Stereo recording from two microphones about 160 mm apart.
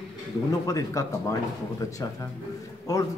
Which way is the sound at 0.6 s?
20° left (ahead or behind).